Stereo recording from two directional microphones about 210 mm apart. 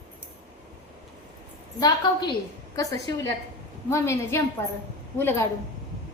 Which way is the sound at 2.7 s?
15° left (ahead or behind).